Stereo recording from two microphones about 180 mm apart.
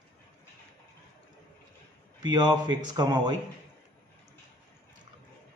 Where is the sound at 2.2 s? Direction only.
25° right (ahead or behind).